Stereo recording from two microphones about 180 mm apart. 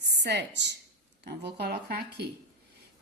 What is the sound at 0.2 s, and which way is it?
Speech, 70° right (ahead or behind).